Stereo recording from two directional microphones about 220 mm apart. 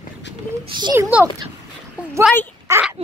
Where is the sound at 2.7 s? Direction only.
15° right (ahead or behind).